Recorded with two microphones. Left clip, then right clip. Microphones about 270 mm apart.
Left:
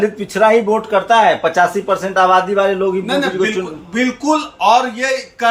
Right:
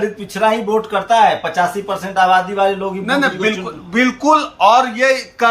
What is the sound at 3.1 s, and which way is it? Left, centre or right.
A man's voice, centre.